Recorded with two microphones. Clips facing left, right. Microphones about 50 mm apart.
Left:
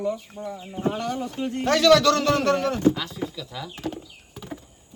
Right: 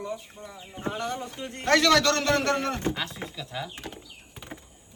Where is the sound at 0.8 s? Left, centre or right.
Right.